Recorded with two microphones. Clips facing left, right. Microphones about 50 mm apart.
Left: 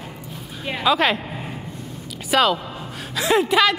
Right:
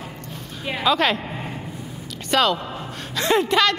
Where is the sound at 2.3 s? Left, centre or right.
Centre.